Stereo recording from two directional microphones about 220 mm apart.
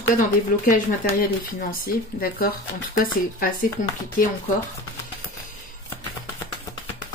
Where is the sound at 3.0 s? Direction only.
40° left (ahead or behind).